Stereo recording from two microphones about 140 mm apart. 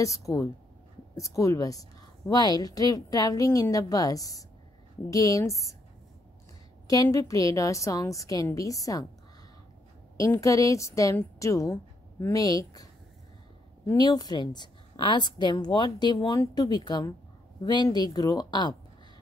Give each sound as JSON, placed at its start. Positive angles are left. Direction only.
{"t": 0.0, "sound": "a woman's voice", "side_deg": 25}
{"t": 6.9, "sound": "a woman's voice", "side_deg": 25}
{"t": 10.1, "sound": "a woman's voice", "side_deg": 25}
{"t": 13.9, "sound": "a woman's voice", "side_deg": 30}